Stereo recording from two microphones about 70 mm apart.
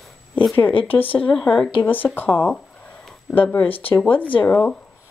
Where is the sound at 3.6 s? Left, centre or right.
Left.